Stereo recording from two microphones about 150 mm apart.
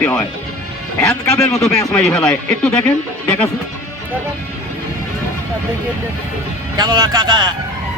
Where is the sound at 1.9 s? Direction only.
5° left (ahead or behind).